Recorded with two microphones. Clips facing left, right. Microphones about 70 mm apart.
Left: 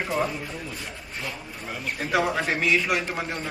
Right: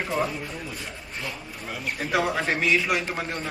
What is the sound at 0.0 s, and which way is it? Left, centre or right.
A man's voice, centre.